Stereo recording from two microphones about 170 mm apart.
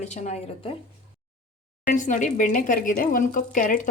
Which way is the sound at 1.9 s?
50° left (ahead or behind).